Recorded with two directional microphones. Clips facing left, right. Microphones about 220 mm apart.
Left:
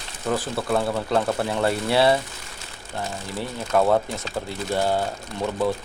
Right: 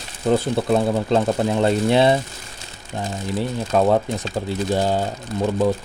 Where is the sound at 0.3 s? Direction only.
25° right (ahead or behind).